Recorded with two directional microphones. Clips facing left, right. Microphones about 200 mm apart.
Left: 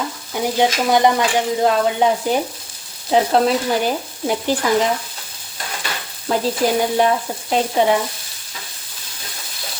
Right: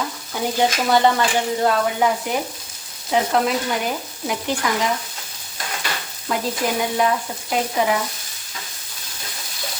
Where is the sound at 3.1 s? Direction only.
30° left (ahead or behind).